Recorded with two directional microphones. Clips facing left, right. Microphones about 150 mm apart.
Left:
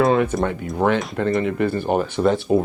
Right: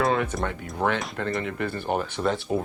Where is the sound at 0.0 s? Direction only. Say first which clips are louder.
Left 7 dB; 20° left (ahead or behind).